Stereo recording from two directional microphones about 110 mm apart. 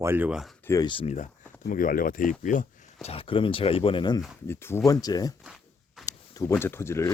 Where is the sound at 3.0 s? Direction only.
60° left (ahead or behind).